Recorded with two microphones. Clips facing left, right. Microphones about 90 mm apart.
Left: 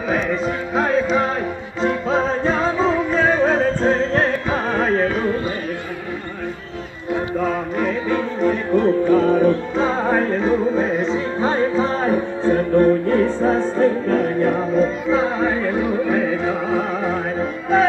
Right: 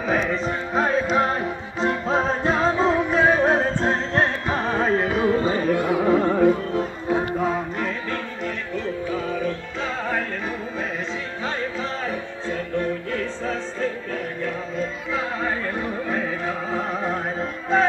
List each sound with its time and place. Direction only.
0.1 s music: centre (ahead or behind)
5.0 s carnatic music: 10° right (ahead or behind)
5.9 s a sound: 85° right
8.7 s music: 55° left (ahead or behind)
9.3 s music: 40° left (ahead or behind)
15.4 s music: 10° left (ahead or behind)